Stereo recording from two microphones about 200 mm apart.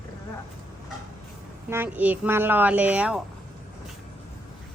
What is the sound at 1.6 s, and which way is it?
A woman's voice, 10° right (ahead or behind).